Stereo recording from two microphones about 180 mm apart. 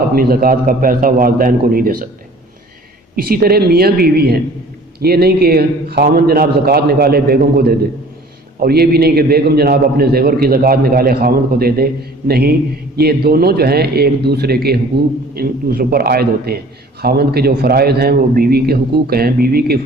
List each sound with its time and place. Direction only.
0.1 s a man's voice: 55° right (ahead or behind)
3.2 s a man's voice: 55° right (ahead or behind)